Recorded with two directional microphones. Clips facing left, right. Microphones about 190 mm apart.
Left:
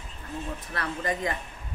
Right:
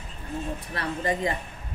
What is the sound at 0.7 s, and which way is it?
Speech, 30° right (ahead or behind).